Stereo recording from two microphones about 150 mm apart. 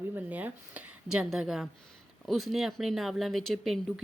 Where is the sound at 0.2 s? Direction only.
10° right (ahead or behind).